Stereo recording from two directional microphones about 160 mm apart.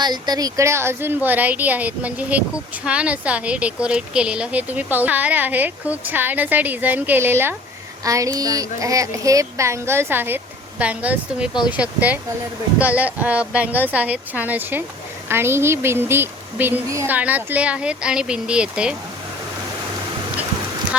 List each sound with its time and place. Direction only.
0.0 s speech: 25° right (ahead or behind); by 18.9 s 5° right (ahead or behind)
20.9 s speech: 5° right (ahead or behind)